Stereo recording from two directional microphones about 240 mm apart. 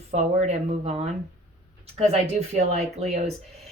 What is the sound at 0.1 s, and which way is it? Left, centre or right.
Speech, right.